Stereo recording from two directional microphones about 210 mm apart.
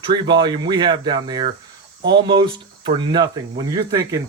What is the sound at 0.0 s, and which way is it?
Speech, 20° right (ahead or behind).